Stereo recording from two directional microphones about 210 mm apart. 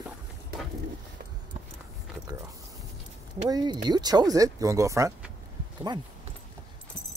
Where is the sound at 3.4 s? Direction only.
20° right (ahead or behind).